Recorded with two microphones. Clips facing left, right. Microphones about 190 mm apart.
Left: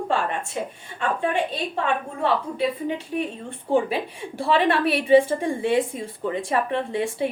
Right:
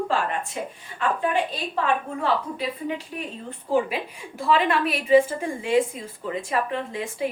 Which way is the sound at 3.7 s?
30° left (ahead or behind).